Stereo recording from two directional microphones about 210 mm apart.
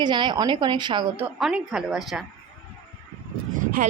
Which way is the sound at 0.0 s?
20° right (ahead or behind).